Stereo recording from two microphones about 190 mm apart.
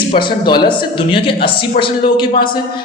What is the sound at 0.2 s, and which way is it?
A woman's voice, 25° left (ahead or behind).